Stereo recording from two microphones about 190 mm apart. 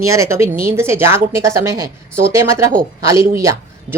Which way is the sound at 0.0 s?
15° right (ahead or behind).